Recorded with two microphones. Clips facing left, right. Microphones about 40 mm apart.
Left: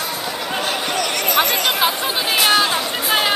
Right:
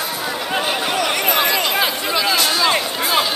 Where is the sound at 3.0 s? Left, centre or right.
Left.